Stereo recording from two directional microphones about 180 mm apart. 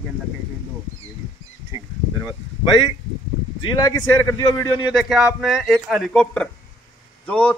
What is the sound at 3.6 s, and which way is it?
A man's voice, 20° left (ahead or behind).